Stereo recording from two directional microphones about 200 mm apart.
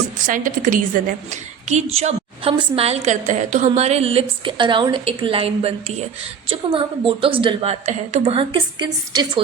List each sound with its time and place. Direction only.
0.3 s a woman's voice: 40° right (ahead or behind); by 9.4 s 20° right (ahead or behind)